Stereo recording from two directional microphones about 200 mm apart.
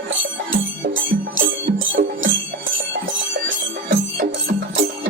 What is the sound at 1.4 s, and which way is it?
Music, 75° right (ahead or behind).